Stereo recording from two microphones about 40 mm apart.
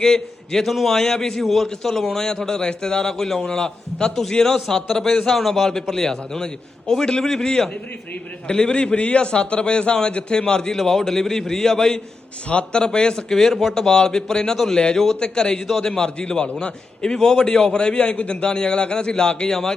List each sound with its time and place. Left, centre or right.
0.0 s a man's voice: centre
0.6 s a man's voice: centre
0.9 s a man's voice: centre
3.4 s a man's voice: centre
10.8 s a man's voice: centre
12.5 s a man's voice: left
13.3 s a man's voice: centre
13.7 s a man's voice: centre